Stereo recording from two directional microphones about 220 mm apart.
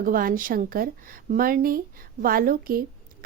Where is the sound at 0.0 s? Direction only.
40° right (ahead or behind).